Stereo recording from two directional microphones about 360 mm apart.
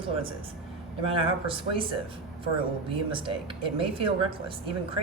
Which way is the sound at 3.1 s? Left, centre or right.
Centre.